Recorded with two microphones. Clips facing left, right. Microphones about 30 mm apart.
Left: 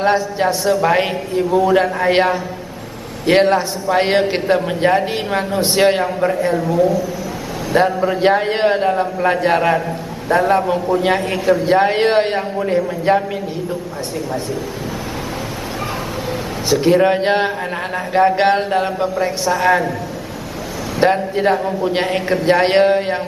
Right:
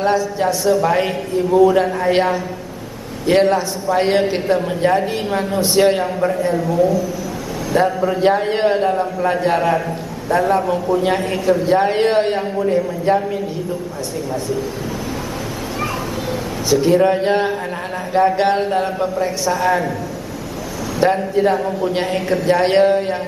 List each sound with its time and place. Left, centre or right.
0.0 s a man's voice: left
6.5 s a man's voice: centre
7.7 s a man's voice: left
16.3 s a man's voice: left
21.0 s a man's voice: left